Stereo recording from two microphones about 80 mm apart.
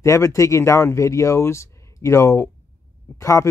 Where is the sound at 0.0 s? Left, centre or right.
Left.